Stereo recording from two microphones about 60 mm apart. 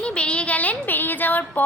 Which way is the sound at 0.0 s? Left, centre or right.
Centre.